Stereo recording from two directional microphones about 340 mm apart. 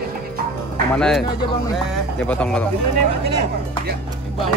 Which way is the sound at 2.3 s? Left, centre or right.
Centre.